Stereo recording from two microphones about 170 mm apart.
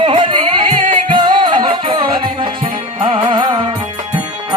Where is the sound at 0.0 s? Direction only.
30° right (ahead or behind).